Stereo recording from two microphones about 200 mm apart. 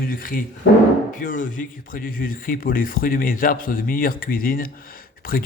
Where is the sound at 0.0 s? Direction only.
45° left (ahead or behind).